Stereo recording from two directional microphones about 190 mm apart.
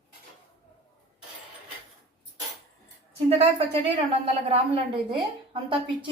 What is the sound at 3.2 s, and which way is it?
A woman's voice, 30° right (ahead or behind).